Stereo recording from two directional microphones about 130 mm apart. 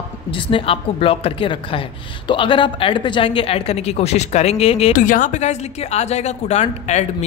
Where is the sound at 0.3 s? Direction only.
40° left (ahead or behind).